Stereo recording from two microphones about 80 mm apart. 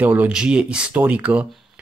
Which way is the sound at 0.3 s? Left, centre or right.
Centre.